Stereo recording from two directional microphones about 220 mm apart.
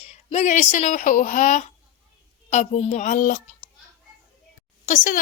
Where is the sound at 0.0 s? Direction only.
30° left (ahead or behind).